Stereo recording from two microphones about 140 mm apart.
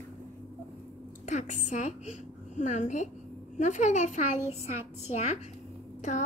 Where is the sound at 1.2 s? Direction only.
60° left (ahead or behind).